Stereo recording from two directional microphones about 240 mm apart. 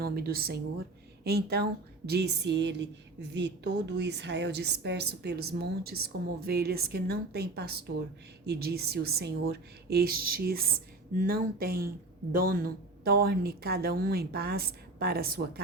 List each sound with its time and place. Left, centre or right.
0.0 s a woman's voice: right